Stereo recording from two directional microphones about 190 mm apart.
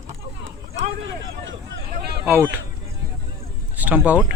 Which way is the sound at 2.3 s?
10° right (ahead or behind).